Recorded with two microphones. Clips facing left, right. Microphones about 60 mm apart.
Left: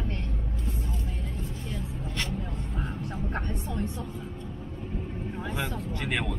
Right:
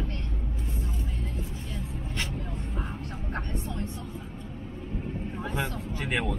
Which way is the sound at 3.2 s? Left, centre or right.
Left.